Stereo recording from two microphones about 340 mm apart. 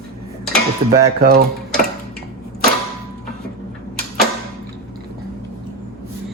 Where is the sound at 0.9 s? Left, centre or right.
Right.